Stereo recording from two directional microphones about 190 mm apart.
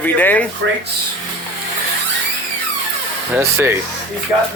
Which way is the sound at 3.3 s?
10° right (ahead or behind).